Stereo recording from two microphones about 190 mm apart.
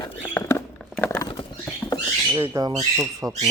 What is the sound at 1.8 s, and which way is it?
Rodents, 15° left (ahead or behind).